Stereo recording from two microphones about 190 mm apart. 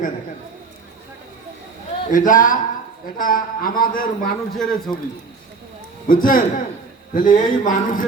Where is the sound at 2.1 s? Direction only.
45° left (ahead or behind).